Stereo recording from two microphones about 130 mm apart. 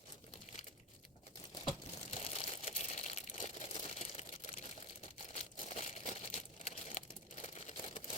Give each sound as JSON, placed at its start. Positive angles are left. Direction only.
{"t": 2.0, "sound": "crumpling", "side_deg": 50}
{"t": 3.8, "sound": "a sound", "side_deg": 55}
{"t": 5.3, "sound": "crumpling", "side_deg": 55}
{"t": 7.4, "sound": "camera", "side_deg": 60}